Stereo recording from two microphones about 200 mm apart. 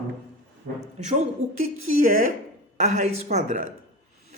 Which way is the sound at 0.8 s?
35° right (ahead or behind).